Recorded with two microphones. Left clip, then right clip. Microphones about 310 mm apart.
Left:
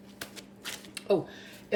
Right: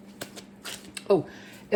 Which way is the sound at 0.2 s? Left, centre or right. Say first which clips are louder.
Right 2 dB; centre.